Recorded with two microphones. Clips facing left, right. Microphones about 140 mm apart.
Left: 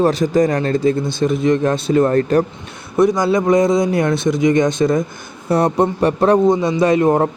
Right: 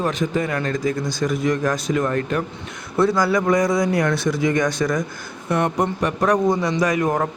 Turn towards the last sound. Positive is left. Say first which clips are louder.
# left 6 dB
turn(degrees=25)  # may be behind; listen again after turning